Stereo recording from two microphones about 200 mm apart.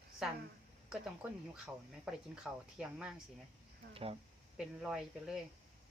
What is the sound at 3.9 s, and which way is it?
Speech, 30° right (ahead or behind).